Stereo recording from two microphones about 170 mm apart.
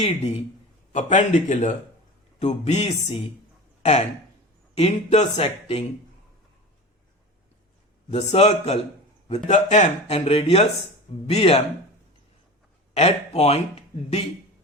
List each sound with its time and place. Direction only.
0.0 s speech: 40° left (ahead or behind)
4.8 s speech: 40° left (ahead or behind)
8.1 s speech: 40° left (ahead or behind)
12.9 s speech: 40° left (ahead or behind)